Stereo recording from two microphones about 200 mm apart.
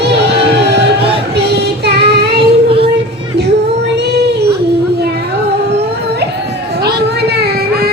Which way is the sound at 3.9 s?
55° right (ahead or behind).